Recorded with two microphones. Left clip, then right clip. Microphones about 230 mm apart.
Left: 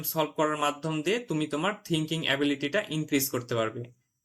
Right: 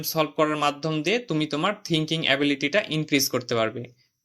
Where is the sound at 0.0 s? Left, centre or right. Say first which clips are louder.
Right 4 dB; right.